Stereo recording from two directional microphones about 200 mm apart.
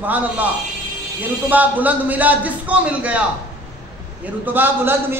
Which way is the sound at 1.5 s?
10° right (ahead or behind).